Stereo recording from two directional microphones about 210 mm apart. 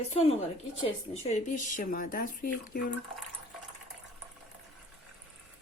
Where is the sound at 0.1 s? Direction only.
30° left (ahead or behind).